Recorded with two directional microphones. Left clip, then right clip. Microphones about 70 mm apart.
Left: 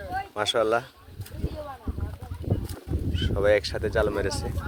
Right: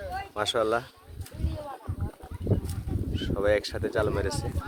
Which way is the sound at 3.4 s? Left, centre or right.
Centre.